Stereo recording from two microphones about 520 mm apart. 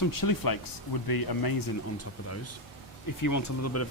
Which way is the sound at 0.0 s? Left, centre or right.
Left.